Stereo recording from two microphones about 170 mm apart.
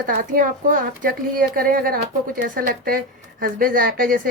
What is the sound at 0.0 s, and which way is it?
A woman's voice, 55° right (ahead or behind).